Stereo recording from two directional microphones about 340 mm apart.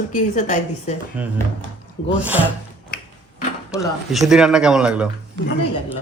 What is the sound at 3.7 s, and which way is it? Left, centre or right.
Speech, centre.